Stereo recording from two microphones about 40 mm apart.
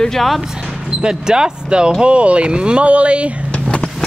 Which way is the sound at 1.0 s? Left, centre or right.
Centre.